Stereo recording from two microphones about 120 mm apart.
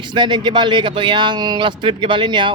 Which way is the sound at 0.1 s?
40° right (ahead or behind).